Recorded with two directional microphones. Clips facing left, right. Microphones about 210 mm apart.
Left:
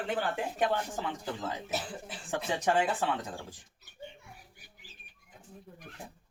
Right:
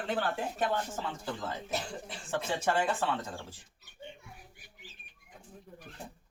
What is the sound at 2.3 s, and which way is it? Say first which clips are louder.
Speech: left 1 dB; 15° left (ahead or behind).